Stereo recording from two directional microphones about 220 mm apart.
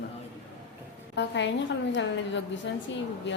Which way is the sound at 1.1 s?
55° left (ahead or behind).